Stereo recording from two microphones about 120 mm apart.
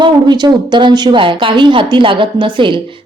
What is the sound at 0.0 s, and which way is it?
A woman's voice, 40° right (ahead or behind).